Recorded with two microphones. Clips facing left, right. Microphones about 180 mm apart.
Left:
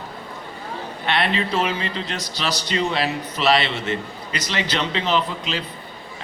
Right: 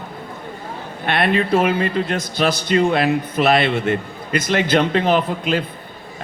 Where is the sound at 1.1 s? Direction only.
50° right (ahead or behind).